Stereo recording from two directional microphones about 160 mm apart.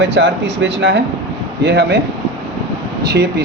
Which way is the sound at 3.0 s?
90° right.